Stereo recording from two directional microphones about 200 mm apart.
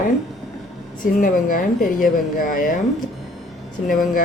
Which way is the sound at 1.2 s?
45° left (ahead or behind).